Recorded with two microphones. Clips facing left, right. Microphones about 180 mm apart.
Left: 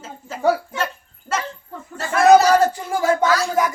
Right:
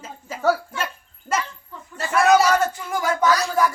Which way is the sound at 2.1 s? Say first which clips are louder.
Left 4 dB; 35° left (ahead or behind).